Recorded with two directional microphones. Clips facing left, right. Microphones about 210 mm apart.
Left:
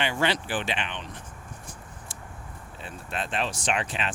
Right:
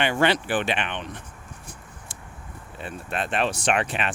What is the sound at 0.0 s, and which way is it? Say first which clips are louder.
Speech: right 5 dB; 60° right (ahead or behind).